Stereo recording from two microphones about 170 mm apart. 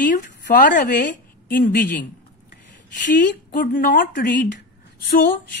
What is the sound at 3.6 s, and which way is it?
Speech, 55° left (ahead or behind).